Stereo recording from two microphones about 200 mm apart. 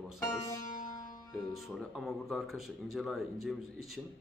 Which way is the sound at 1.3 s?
Centre (ahead or behind).